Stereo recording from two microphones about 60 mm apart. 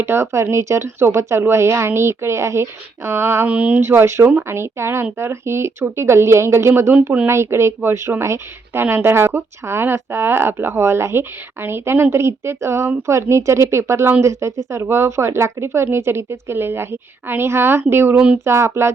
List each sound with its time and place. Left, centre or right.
0.0 s speech: right
3.4 s speech: right
3.8 s speech: right